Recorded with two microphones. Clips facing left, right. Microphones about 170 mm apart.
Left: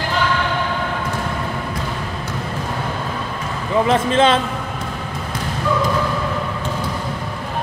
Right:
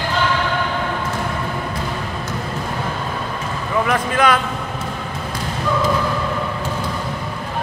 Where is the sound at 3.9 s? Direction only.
25° left (ahead or behind).